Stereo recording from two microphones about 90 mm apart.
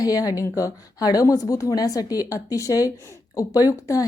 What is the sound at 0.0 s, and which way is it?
Speech, 45° left (ahead or behind).